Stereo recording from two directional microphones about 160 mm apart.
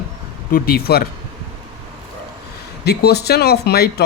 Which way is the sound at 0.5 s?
70° left (ahead or behind).